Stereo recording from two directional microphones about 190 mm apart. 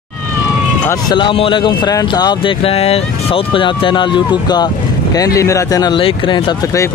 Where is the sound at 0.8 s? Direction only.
20° left (ahead or behind).